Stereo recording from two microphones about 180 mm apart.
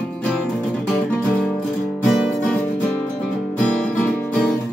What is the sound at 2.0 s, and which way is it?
Music, 5° left (ahead or behind).